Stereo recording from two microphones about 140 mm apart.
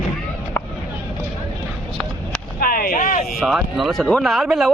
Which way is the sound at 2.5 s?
90° left.